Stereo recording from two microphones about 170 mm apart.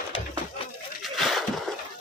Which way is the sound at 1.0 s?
Centre (ahead or behind).